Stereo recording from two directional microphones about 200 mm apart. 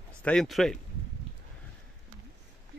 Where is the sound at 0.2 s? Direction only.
5° left (ahead or behind).